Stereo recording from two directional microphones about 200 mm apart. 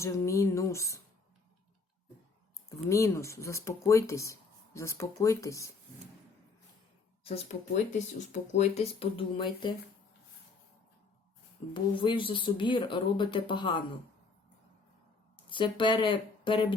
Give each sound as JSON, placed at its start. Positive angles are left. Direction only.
{"t": 0.0, "sound": "speech", "side_deg": 15}
{"t": 2.6, "sound": "speech", "side_deg": 15}
{"t": 7.3, "sound": "speech", "side_deg": 30}
{"t": 11.7, "sound": "speech", "side_deg": 25}
{"t": 15.4, "sound": "speech", "side_deg": 25}